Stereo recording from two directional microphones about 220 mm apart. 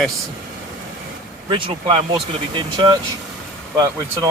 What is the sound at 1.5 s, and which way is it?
Speech, 25° right (ahead or behind).